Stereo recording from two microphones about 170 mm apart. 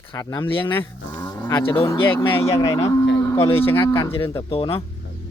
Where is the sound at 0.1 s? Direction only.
20° left (ahead or behind).